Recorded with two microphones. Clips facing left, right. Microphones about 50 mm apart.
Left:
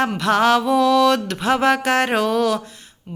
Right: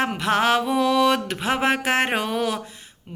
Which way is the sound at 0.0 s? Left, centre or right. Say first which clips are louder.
Left 4 dB; right.